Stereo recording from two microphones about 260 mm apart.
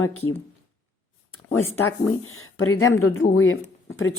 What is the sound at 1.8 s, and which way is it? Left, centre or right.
A woman's voice, left.